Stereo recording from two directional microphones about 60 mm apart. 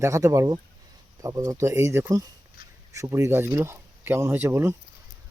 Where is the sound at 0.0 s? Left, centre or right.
Right.